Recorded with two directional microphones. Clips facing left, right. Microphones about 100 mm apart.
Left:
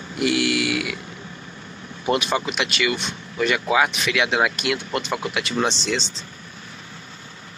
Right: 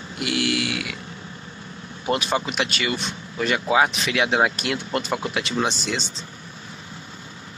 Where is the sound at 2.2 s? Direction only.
35° right (ahead or behind).